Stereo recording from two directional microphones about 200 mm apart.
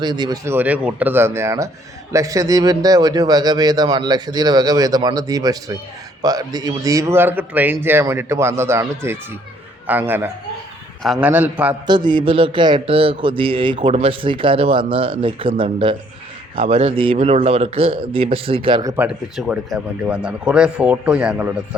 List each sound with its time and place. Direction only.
0.0 s a man's voice: 20° right (ahead or behind)
11.9 s a man's voice: 20° right (ahead or behind)
18.9 s speech: 5° right (ahead or behind)